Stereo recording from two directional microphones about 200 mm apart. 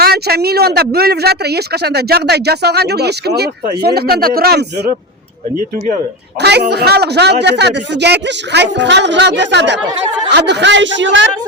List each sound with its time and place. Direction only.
0.0 s speech: 50° right (ahead or behind)
6.4 s speech: 55° right (ahead or behind)